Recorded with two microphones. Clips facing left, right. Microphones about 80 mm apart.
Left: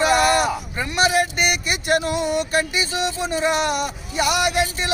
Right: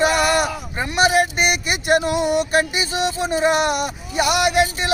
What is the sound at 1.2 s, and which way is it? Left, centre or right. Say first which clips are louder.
Music: right 2 dB; right.